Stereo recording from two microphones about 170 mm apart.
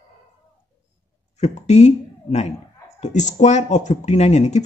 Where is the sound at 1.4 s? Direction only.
40° left (ahead or behind).